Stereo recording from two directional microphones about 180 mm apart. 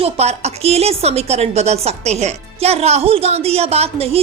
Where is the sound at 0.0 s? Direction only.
35° right (ahead or behind).